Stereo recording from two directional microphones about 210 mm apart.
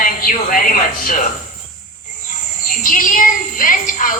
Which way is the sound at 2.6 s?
40° left (ahead or behind).